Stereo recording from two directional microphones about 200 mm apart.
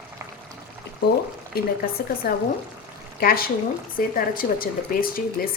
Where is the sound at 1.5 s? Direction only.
50° left (ahead or behind).